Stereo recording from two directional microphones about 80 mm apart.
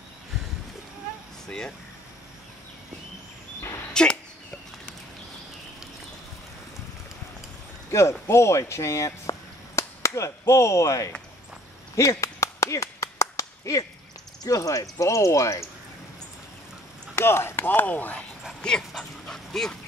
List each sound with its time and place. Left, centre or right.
3.9 s a sound: centre
7.9 s speech: left
12.0 s clapping: left
14.4 s speech: left
17.1 s speech: left
18.6 s dog: centre